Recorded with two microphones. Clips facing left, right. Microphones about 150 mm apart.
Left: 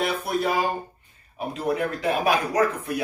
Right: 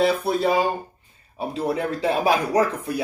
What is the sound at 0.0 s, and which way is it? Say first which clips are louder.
Speech: right 5 dB; 30° right (ahead or behind).